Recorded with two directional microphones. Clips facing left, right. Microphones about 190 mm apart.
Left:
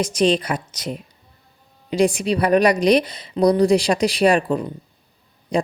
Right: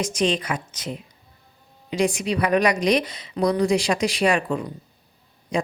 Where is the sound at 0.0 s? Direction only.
35° left (ahead or behind).